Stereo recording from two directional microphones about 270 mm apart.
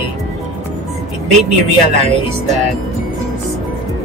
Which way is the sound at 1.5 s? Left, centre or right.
Right.